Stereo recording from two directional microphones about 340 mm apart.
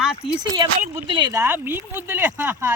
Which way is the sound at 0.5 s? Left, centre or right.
Centre.